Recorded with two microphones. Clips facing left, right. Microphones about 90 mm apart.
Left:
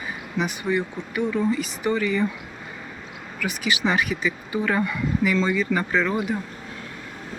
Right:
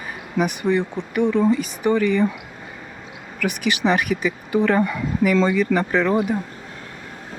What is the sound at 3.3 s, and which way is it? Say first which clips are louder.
Speech: right 3 dB; 60° right (ahead or behind).